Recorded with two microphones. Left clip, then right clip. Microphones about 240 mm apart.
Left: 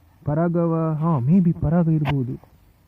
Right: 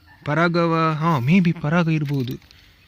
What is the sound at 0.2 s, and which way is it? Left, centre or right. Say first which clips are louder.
Speech: right 3 dB; right.